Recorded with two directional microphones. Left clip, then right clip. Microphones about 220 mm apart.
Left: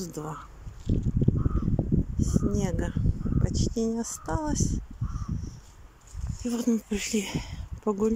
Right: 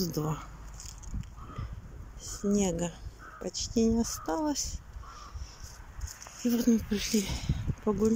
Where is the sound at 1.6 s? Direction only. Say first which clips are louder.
Left 12 dB; 5° right (ahead or behind).